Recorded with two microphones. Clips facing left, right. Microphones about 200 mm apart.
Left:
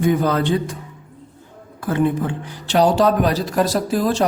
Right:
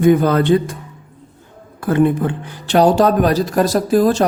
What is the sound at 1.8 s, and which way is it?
Speech, 55° right (ahead or behind).